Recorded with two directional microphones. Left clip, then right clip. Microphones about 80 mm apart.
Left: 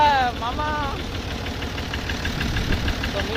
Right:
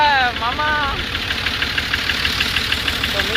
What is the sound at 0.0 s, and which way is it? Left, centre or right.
Vehicle, right.